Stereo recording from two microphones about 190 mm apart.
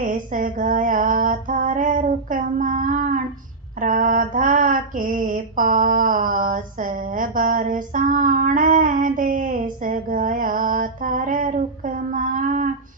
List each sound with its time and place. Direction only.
0.0 s female singing: 45° right (ahead or behind)